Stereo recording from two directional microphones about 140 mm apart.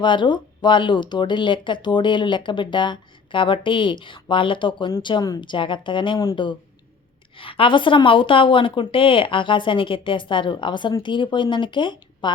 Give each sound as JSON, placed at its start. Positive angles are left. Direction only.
{"t": 0.0, "sound": "speech", "side_deg": 35}